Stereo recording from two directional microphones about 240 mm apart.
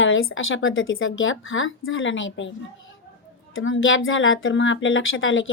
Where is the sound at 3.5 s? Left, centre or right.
Left.